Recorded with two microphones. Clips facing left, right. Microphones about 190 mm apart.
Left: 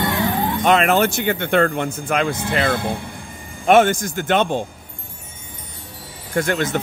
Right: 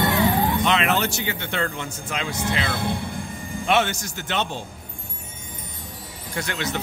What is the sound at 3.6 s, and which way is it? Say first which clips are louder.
Speech: left 8 dB; 50° left (ahead or behind).